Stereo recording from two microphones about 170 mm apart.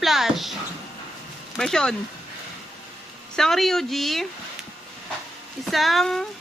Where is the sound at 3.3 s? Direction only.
Centre (ahead or behind).